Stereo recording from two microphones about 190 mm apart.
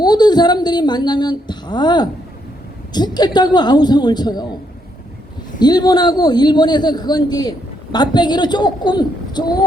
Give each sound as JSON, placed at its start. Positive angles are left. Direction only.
{"t": 0.0, "sound": "speech", "side_deg": 20}
{"t": 5.5, "sound": "speech", "side_deg": 20}